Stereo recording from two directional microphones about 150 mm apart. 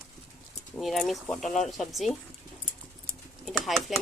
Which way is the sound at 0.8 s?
Centre (ahead or behind).